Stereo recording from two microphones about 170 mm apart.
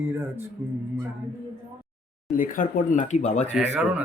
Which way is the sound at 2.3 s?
50° left (ahead or behind).